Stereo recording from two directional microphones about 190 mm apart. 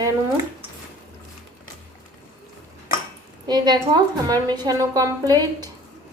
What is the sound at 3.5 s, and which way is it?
A woman's voice, 20° right (ahead or behind).